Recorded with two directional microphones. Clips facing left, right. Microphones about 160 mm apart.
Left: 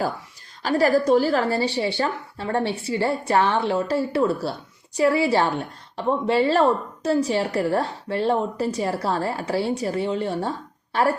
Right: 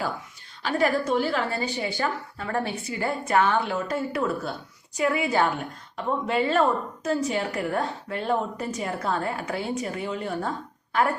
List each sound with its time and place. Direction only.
0.6 s a woman's voice: 40° left (ahead or behind)